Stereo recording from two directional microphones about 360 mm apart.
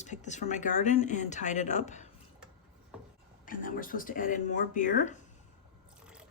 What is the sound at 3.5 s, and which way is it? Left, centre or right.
Speech, left.